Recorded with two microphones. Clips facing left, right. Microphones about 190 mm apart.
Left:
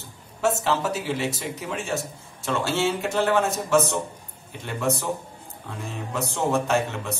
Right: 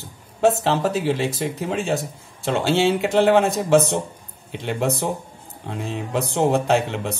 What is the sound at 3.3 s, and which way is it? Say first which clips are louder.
A man's voice: right 5 dB; 60° right (ahead or behind).